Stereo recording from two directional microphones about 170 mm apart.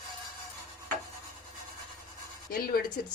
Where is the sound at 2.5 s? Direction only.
60° left (ahead or behind).